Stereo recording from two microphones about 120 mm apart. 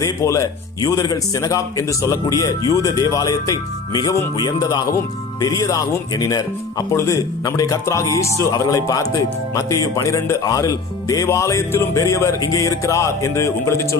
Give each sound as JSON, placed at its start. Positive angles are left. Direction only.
{"t": 0.0, "sound": "speech", "side_deg": 30}